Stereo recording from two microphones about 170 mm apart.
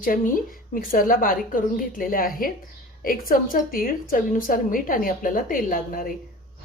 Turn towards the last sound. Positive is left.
turn(degrees=55)  # may be behind; listen again after turning